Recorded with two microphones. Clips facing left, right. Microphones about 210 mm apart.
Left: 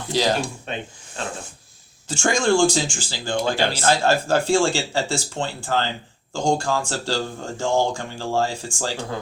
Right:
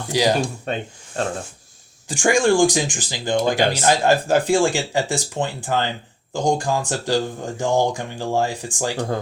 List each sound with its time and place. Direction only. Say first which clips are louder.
0.1 s speech: right 2 dB; 15° right (ahead or behind)
0.6 s speech: right 5 dB; 45° right (ahead or behind)
2.0 s speech: right 3 dB; 15° right (ahead or behind)